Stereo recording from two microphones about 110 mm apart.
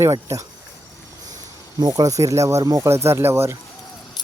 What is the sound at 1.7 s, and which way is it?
Speech, 35° right (ahead or behind).